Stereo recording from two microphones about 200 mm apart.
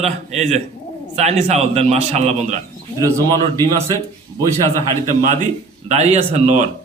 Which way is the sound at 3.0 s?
15° right (ahead or behind).